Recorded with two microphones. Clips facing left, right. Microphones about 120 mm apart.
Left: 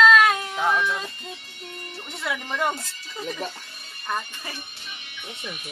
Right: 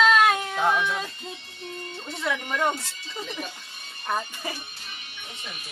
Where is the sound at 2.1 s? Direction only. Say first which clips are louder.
Right 1 dB; 5° left (ahead or behind).